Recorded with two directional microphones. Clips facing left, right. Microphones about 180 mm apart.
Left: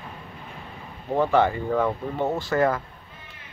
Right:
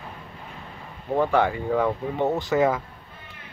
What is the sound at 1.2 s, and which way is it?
Speech, 10° right (ahead or behind).